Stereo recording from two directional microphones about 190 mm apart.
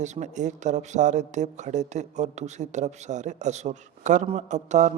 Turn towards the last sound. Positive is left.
turn(degrees=-40)  # may be behind; listen again after turning